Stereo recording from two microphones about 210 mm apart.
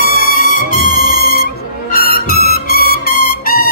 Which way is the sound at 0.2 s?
40° left (ahead or behind).